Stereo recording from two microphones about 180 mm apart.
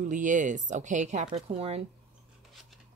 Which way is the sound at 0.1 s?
45° right (ahead or behind).